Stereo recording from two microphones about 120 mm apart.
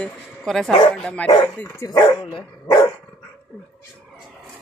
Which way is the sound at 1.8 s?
25° left (ahead or behind).